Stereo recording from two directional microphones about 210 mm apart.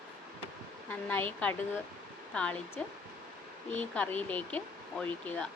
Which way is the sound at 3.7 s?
10° left (ahead or behind).